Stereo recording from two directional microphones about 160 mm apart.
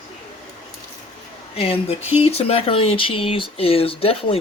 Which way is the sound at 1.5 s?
35° left (ahead or behind).